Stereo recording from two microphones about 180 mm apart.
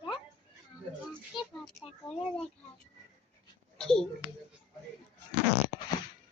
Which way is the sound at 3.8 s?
5° left (ahead or behind).